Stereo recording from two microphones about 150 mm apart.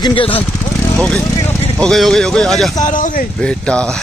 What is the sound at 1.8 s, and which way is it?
Speech, 5° left (ahead or behind).